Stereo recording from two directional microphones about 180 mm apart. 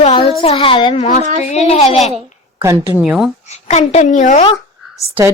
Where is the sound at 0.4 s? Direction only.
30° left (ahead or behind).